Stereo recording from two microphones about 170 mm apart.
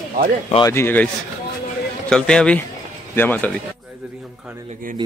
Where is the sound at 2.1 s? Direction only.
5° left (ahead or behind).